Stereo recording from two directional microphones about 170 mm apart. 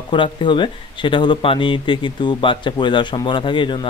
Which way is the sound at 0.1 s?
30° left (ahead or behind).